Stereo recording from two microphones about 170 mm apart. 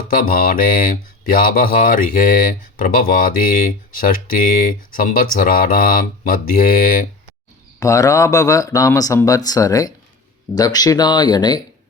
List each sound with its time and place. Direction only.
0.2 s speech: 55° left (ahead or behind)
7.8 s speech: 20° left (ahead or behind)